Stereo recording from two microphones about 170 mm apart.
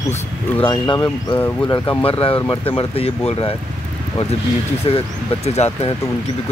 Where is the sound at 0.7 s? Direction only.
25° left (ahead or behind).